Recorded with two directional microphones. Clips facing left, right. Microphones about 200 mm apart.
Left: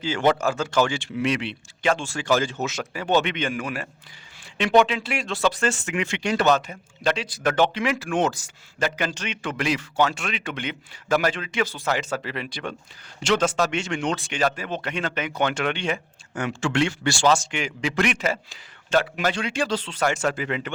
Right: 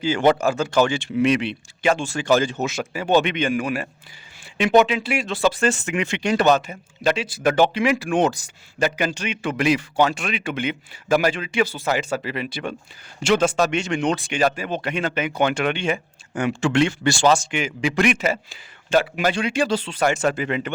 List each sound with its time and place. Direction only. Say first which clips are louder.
0.0 s a man's voice: right 3 dB; 15° right (ahead or behind)